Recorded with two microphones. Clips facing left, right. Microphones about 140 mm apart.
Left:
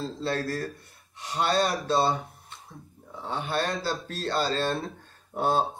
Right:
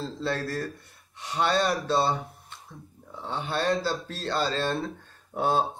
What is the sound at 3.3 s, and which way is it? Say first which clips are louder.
Speech: right 2 dB; 50° left (ahead or behind).